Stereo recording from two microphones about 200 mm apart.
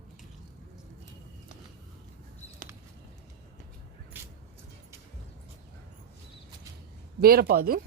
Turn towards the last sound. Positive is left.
turn(degrees=-50)  # may be behind; listen again after turning